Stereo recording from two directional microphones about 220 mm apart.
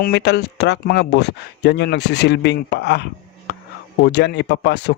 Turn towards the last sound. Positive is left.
turn(degrees=50)  # may be behind; listen again after turning